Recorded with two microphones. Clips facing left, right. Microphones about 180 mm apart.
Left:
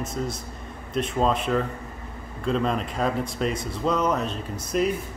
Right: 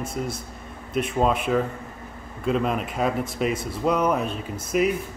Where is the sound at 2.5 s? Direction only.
5° right (ahead or behind).